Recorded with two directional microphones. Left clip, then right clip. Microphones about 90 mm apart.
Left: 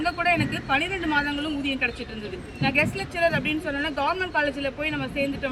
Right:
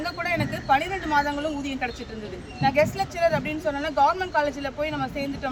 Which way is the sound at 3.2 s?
25° right (ahead or behind).